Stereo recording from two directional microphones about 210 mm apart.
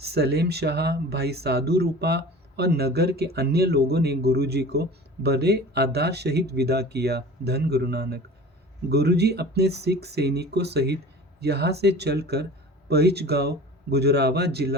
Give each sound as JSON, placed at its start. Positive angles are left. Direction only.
{"t": 0.0, "sound": "speech", "side_deg": -50}